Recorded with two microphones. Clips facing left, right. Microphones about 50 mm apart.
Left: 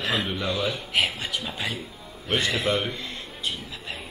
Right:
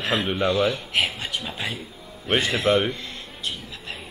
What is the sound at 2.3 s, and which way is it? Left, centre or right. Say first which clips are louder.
Speech: right 3 dB; right.